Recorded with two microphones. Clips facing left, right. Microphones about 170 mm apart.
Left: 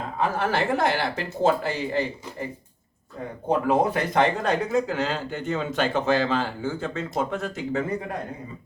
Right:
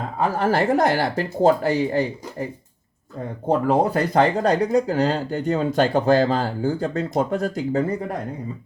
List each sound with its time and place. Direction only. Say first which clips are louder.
0.3 s speech: right 7 dB; 40° right (ahead or behind)
3.7 s speech: right 2 dB; 35° right (ahead or behind)